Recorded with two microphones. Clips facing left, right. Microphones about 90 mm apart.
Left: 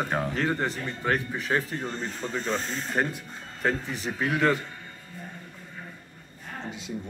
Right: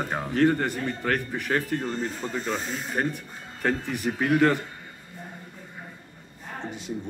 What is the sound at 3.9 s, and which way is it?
Speech, 50° right (ahead or behind).